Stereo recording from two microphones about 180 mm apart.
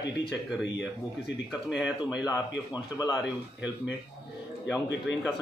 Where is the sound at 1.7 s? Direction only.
5° right (ahead or behind).